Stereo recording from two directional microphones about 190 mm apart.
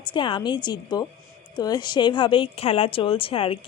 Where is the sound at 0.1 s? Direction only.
25° left (ahead or behind).